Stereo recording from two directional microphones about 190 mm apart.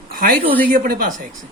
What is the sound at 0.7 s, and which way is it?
Speech, 45° right (ahead or behind).